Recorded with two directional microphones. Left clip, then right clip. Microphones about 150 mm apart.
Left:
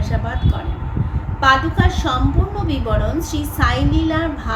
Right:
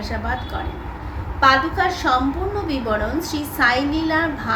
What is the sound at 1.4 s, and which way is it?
A woman's voice, 15° left (ahead or behind).